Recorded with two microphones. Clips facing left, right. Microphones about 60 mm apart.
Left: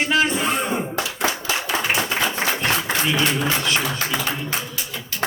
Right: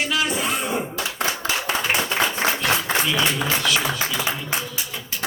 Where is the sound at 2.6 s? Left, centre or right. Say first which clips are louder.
Even; left.